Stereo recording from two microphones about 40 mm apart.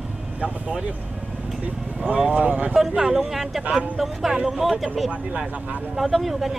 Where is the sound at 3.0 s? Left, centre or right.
Centre.